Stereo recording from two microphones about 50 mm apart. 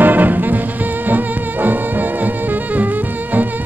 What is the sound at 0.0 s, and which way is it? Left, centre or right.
Music, right.